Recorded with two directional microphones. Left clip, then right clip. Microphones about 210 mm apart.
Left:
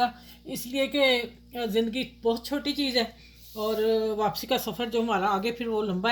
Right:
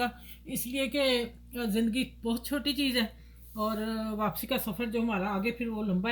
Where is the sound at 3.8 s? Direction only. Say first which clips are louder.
Left 8 dB; 45° left (ahead or behind).